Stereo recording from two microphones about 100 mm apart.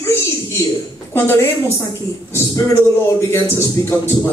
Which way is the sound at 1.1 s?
25° left (ahead or behind).